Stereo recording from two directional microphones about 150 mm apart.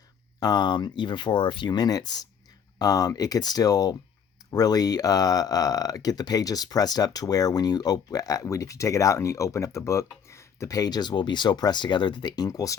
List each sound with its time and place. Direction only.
0.3 s speech: 25° left (ahead or behind)